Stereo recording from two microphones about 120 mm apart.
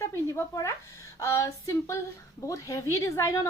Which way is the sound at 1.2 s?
25° left (ahead or behind).